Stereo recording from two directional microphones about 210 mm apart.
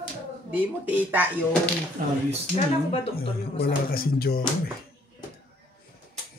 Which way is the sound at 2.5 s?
30° left (ahead or behind).